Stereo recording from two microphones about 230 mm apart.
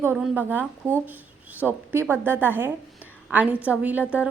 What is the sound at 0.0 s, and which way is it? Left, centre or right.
A woman's voice, centre.